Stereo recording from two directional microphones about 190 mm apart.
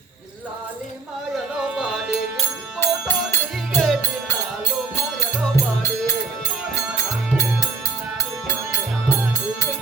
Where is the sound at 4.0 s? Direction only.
15° left (ahead or behind).